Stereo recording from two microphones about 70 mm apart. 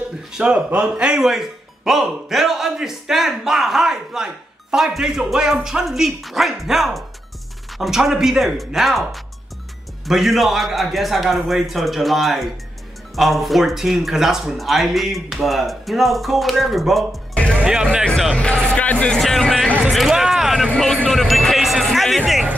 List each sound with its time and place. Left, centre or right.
0.3 s speech: centre
17.3 s music: centre
17.6 s speech: centre
18.8 s speech: centre
19.1 s speech: centre